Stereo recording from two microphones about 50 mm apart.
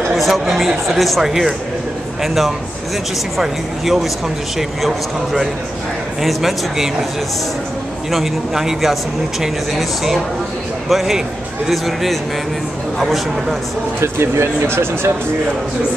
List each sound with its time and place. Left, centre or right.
0.1 s speech: centre
8.1 s speech: centre
14.0 s speech: right